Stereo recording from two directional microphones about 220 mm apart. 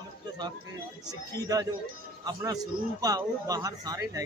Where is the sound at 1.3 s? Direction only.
15° right (ahead or behind).